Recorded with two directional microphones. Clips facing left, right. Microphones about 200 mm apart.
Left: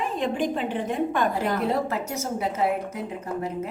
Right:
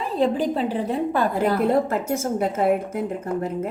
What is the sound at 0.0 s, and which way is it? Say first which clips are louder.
A woman's voice: right 4 dB; 35° right (ahead or behind).